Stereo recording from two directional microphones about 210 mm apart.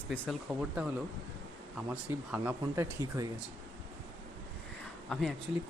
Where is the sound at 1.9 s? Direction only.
5° right (ahead or behind).